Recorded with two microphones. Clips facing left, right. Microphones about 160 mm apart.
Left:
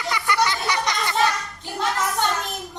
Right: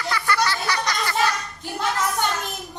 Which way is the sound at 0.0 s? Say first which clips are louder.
Left 1 dB; 20° left (ahead or behind).